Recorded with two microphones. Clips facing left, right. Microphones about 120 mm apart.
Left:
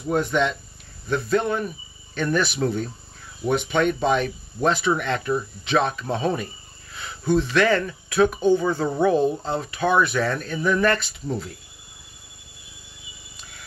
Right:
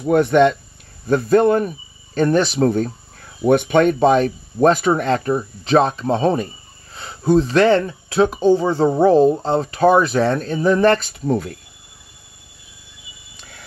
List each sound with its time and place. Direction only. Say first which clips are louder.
0.0 s speech: right 8 dB; 60° right (ahead or behind)
1.0 s speech: right 8 dB; 45° right (ahead or behind)